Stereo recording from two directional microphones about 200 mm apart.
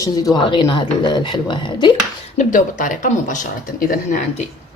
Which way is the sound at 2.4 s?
40° left (ahead or behind).